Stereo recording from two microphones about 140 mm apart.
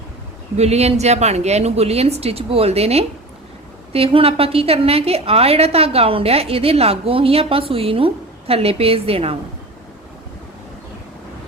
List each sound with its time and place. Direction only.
0.5 s a woman's voice: 50° right (ahead or behind)